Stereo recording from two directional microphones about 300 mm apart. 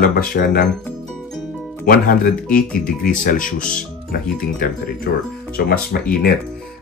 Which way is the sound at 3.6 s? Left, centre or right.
Centre.